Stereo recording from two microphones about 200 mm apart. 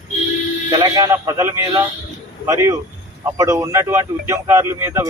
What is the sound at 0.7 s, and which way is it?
A man's voice, 15° right (ahead or behind).